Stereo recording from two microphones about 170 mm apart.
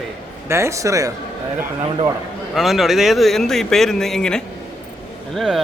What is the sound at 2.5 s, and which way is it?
Speech, centre (ahead or behind).